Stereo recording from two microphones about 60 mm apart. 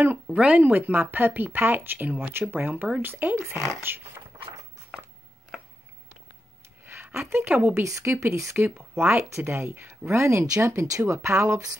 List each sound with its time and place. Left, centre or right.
0.0 s speech: right
3.3 s speech: right
6.8 s a sound: right
7.2 s speech: right
8.0 s speech: right